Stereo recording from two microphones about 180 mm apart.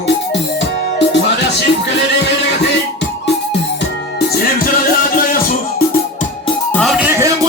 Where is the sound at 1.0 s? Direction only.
75° left (ahead or behind).